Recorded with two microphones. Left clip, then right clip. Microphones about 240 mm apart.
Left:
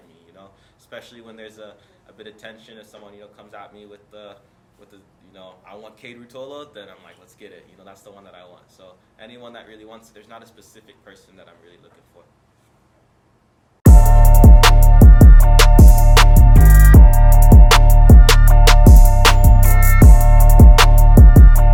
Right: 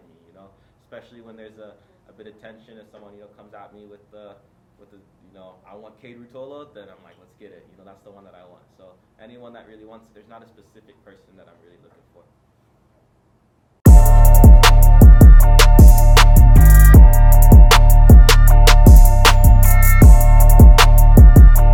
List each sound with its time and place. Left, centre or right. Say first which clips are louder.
0.9 s speech: left 3 dB; centre
8.4 s speech: left 2 dB; right
9.1 s speech: left 3 dB; centre
13.8 s music: even; centre